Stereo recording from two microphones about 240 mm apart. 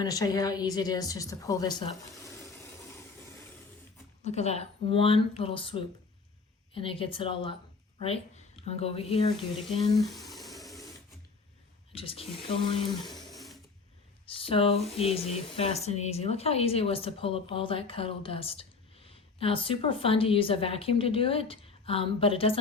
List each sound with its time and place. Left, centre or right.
0.0 s speech: centre
4.2 s speech: left
10.0 s a sound: centre
11.9 s speech: left
13.3 s sewing machine: centre
14.3 s speech: left